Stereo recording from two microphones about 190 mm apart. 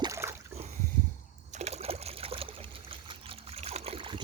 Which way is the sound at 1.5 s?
35° right (ahead or behind).